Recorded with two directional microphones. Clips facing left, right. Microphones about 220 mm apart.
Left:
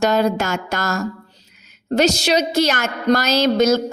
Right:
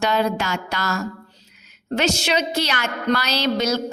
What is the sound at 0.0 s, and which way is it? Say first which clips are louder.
A woman's voice: left 4 dB; 45° left (ahead or behind).